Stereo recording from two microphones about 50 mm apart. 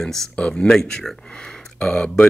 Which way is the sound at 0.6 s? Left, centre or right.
Centre.